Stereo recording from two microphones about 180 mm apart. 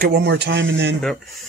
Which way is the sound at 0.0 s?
70° right (ahead or behind).